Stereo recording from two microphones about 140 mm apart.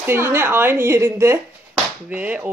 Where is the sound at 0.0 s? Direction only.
15° right (ahead or behind).